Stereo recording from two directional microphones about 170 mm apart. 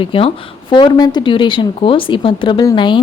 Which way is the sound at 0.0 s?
30° left (ahead or behind).